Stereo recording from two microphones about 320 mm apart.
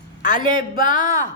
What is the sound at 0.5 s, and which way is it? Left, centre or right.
Speech, left.